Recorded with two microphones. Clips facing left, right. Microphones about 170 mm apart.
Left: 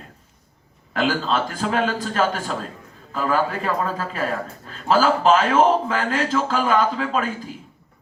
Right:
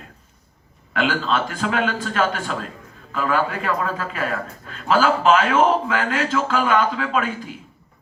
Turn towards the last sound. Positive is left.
turn(degrees=40)  # may be behind; listen again after turning